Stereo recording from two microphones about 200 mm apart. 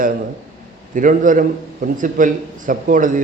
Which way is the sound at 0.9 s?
40° right (ahead or behind).